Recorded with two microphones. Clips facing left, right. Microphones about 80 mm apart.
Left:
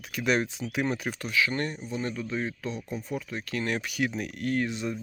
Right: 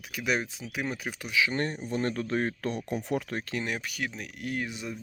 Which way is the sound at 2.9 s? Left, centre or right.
Right.